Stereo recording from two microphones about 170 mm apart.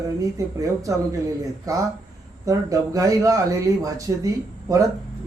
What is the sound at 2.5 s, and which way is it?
Speech, 20° right (ahead or behind).